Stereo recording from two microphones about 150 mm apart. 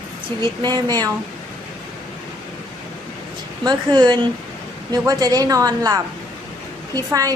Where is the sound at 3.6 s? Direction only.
30° right (ahead or behind).